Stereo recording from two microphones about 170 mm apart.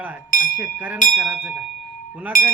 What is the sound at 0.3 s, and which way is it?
Speech, 55° left (ahead or behind).